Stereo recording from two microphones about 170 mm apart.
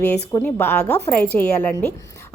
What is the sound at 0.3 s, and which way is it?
Speech, 15° left (ahead or behind).